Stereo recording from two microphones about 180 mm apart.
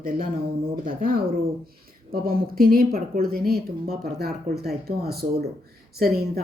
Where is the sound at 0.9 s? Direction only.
50° right (ahead or behind).